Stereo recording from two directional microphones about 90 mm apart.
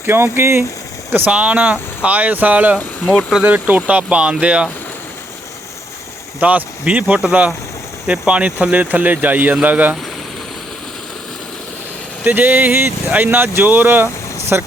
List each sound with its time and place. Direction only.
0.0 s speech: 25° right (ahead or behind)
1.1 s speech: 15° right (ahead or behind)
6.4 s speech: 15° right (ahead or behind)
12.2 s speech: 20° right (ahead or behind)